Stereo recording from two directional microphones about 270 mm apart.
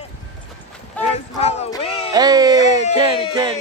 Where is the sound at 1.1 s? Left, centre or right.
Left.